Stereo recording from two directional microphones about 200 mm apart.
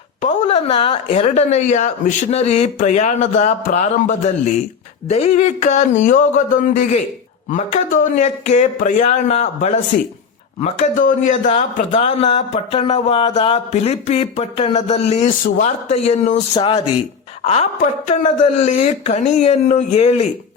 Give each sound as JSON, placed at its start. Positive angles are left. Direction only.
{"t": 0.2, "sound": "a man's voice", "side_deg": 35}
{"t": 16.6, "sound": "a man's voice", "side_deg": 25}